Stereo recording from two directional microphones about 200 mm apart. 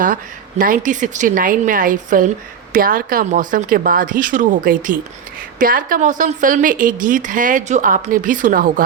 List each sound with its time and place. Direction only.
0.6 s a woman's voice: 40° right (ahead or behind)